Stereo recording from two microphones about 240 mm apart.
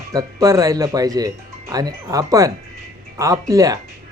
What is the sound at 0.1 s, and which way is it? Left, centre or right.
Speech, centre.